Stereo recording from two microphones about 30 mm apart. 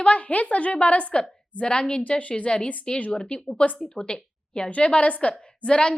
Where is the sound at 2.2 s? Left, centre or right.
Left.